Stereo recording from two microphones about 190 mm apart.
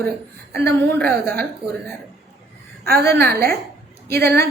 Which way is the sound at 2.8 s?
55° right (ahead or behind).